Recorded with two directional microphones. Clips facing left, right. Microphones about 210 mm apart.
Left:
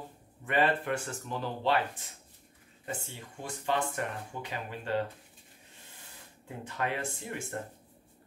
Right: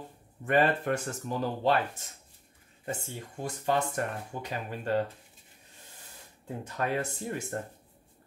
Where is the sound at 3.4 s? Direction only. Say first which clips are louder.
Right 3 dB; 40° right (ahead or behind).